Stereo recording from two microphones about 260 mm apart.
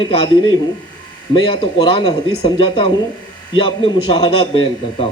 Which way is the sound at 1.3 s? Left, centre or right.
Centre.